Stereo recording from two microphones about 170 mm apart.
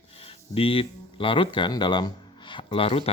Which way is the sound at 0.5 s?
35° left (ahead or behind).